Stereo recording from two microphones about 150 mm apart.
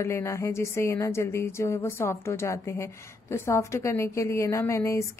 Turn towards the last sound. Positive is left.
turn(degrees=20)  # may be behind; listen again after turning